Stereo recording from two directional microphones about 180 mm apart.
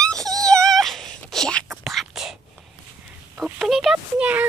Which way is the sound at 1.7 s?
Centre (ahead or behind).